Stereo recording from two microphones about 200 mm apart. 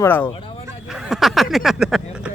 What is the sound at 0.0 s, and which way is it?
Speech, 10° left (ahead or behind).